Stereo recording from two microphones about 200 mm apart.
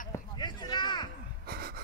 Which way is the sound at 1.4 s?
50° right (ahead or behind).